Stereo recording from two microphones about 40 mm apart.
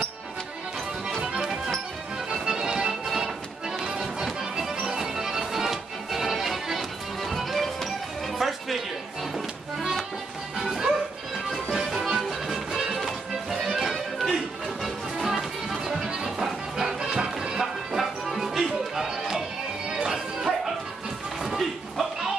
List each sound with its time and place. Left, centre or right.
1.2 s music: centre
4.0 s music: centre
10.6 s music: centre
14.3 s music: centre